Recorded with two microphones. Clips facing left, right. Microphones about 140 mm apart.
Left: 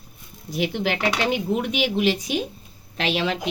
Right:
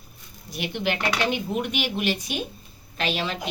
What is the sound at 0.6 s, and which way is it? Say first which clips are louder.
Speech: left 3 dB; 90° left.